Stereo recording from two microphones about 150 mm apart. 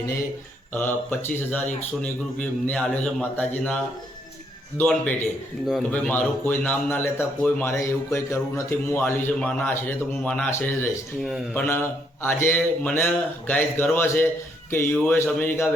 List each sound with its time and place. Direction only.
0.7 s a man's voice: 10° left (ahead or behind)
11.2 s a man's voice: 5° right (ahead or behind)
11.5 s a man's voice: 15° left (ahead or behind)